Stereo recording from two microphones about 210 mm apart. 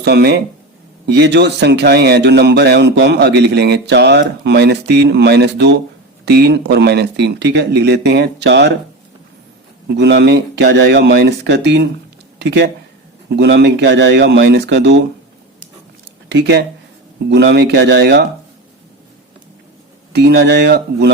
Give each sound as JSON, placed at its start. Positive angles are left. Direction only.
{"t": 0.0, "sound": "speech", "side_deg": -50}
{"t": 9.9, "sound": "speech", "side_deg": -55}
{"t": 16.3, "sound": "speech", "side_deg": -55}
{"t": 20.1, "sound": "speech", "side_deg": -55}